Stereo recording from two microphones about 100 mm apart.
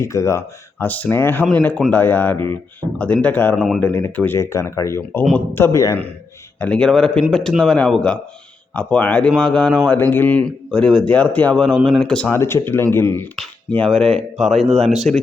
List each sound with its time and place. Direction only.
0.0 s speech: 30° left (ahead or behind)
0.9 s a man's voice: 15° left (ahead or behind)
6.6 s a man's voice: 10° left (ahead or behind)
10.0 s speech: 20° left (ahead or behind)
10.4 s a man's voice: 5° left (ahead or behind)
12.3 s speech: 25° left (ahead or behind)
13.7 s speech: 10° left (ahead or behind)